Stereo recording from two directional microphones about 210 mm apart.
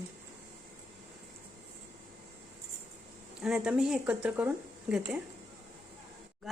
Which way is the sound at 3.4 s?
5° right (ahead or behind).